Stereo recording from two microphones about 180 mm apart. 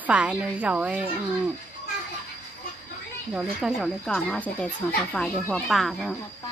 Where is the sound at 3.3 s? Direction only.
Centre (ahead or behind).